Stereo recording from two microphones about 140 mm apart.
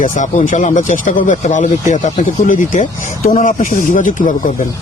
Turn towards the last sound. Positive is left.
turn(degrees=70)  # may be behind; listen again after turning